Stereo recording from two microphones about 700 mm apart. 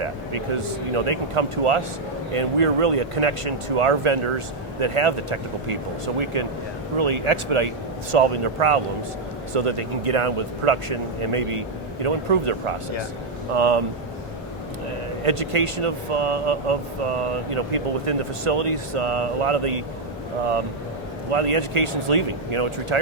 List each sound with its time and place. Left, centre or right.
0.0 s speech: right
15.2 s speech: right
21.3 s speech: right